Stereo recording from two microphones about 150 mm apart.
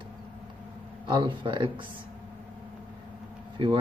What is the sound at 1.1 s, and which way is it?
Speech, 35° right (ahead or behind).